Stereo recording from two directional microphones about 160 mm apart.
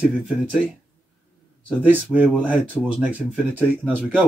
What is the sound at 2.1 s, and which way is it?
Speech, centre (ahead or behind).